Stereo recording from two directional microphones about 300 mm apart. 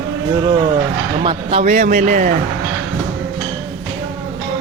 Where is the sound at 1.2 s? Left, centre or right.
Right.